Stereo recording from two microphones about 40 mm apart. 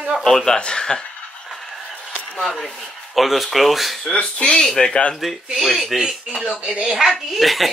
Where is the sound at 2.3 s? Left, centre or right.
Centre.